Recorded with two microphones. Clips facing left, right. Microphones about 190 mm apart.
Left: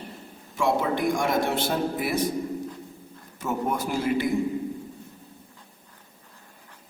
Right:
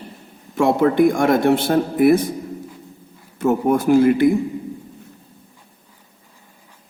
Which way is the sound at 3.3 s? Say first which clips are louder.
Right 10 dB; 55° right (ahead or behind).